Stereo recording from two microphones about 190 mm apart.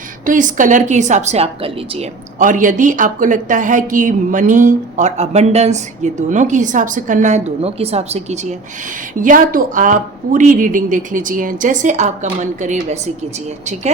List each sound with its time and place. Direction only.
0.3 s a woman's voice: 45° right (ahead or behind)
2.4 s a woman's voice: 45° right (ahead or behind)